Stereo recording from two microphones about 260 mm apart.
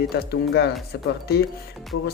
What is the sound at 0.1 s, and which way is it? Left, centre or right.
Speech, left.